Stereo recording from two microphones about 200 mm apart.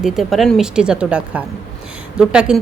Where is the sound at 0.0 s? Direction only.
Centre (ahead or behind).